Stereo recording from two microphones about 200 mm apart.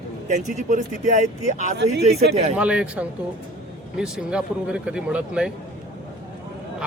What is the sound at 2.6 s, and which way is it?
A man's voice, 5° right (ahead or behind).